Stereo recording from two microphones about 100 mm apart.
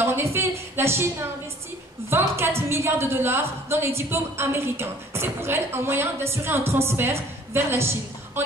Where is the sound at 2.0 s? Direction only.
25° right (ahead or behind).